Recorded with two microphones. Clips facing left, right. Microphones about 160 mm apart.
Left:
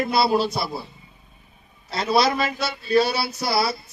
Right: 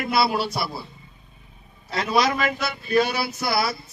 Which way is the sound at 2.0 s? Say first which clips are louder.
Left 2 dB; 35° left (ahead or behind).